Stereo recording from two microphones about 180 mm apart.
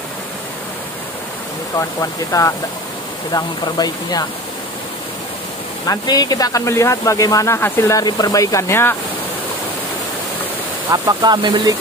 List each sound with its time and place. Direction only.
1.8 s speech: 20° left (ahead or behind)
5.9 s speech: 20° left (ahead or behind)
10.9 s speech: 20° right (ahead or behind)